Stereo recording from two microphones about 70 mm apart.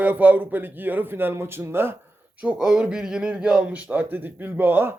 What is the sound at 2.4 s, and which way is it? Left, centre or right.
Speech, centre.